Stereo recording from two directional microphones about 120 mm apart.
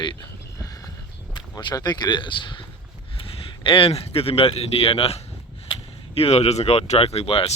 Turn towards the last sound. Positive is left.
turn(degrees=55)  # may be behind; listen again after turning